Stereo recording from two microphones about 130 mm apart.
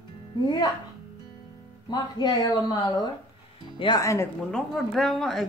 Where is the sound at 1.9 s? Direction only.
35° left (ahead or behind).